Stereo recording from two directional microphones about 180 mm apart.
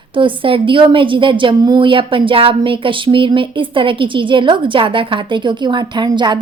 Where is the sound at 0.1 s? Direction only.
30° right (ahead or behind).